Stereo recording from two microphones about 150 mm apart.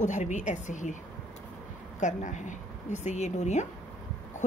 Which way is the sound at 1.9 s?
55° left (ahead or behind).